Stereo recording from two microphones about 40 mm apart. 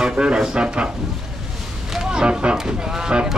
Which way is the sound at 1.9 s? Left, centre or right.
Centre.